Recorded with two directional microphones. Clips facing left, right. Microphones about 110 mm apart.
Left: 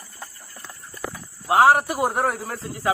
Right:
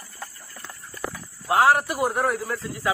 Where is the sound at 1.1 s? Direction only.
20° left (ahead or behind).